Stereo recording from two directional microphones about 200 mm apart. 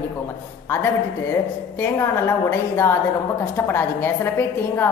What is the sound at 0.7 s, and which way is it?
A woman's voice, 10° left (ahead or behind).